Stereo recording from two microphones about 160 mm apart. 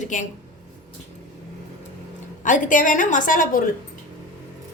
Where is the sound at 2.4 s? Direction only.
55° left (ahead or behind).